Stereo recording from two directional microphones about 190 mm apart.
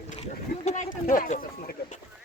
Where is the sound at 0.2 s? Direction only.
35° left (ahead or behind).